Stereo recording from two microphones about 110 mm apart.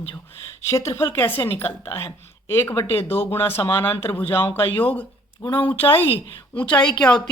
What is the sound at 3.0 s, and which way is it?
A woman's voice, 20° left (ahead or behind).